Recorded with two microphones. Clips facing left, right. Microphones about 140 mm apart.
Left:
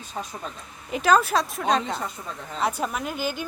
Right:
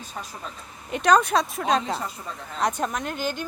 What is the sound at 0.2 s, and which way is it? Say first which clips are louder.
Speech: left 4 dB; centre (ahead or behind).